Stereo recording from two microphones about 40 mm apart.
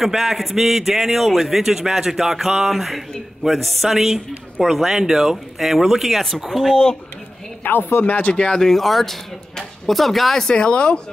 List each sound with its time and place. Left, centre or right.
0.0 s a man's voice: centre
7.6 s speech: left
8.0 s speech: left
8.5 s speech: centre
10.3 s speech: left